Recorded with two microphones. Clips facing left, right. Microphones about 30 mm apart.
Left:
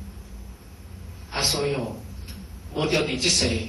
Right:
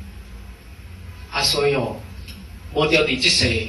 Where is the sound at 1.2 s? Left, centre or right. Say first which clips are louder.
Right 6 dB; right.